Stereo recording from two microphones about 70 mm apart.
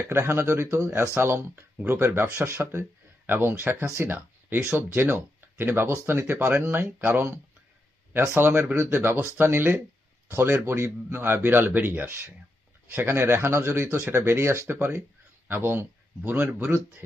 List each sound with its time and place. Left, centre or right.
0.1 s a man's voice: right